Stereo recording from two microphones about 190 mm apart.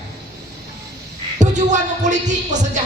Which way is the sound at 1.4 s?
40° right (ahead or behind).